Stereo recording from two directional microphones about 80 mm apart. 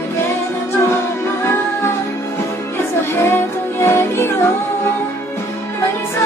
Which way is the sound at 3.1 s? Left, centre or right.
Left.